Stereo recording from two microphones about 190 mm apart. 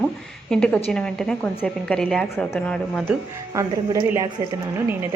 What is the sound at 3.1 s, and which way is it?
Speech, 15° right (ahead or behind).